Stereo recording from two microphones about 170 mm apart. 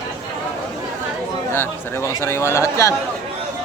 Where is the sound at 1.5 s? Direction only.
15° left (ahead or behind).